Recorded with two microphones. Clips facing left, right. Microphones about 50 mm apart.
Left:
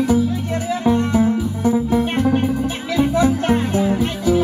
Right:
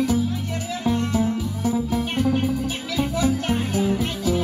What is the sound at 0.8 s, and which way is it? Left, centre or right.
Music, left.